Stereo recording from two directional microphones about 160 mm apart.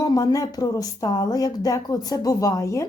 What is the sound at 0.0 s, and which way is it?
Speech, 25° left (ahead or behind).